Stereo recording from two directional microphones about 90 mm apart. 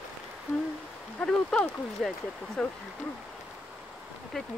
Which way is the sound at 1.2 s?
10° left (ahead or behind).